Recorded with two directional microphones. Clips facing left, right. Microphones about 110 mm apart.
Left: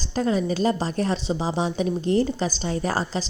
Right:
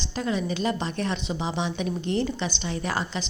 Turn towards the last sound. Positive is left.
turn(degrees=35)  # may be behind; listen again after turning